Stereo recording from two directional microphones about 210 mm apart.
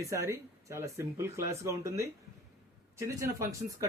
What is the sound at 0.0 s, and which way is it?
Speech, 15° right (ahead or behind).